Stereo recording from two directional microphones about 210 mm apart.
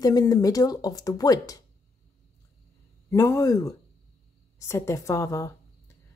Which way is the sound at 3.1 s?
15° left (ahead or behind).